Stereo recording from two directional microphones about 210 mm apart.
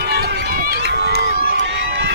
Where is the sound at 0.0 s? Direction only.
50° right (ahead or behind).